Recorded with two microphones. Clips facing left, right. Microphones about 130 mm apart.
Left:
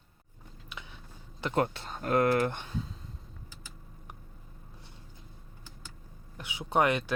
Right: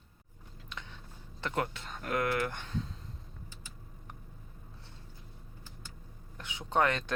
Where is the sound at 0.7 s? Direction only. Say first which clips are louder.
Even; 10° left (ahead or behind).